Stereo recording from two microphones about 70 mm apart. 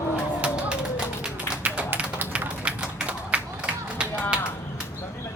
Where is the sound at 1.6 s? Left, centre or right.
Right.